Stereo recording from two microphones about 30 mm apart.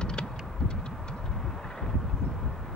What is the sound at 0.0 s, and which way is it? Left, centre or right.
Vehicle, left.